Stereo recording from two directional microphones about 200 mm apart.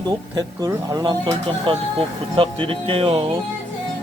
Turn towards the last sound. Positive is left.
turn(degrees=-25)  # may be behind; listen again after turning